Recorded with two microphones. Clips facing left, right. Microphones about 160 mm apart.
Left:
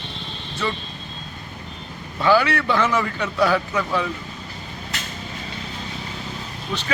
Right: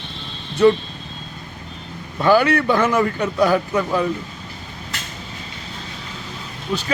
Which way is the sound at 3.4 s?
15° right (ahead or behind).